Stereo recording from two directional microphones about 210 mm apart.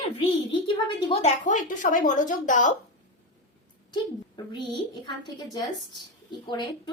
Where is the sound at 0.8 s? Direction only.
30° left (ahead or behind).